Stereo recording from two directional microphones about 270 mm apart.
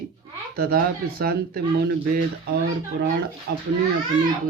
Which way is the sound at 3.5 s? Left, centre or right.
Right.